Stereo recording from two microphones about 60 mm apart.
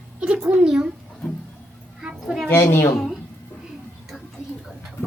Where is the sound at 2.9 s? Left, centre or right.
Centre.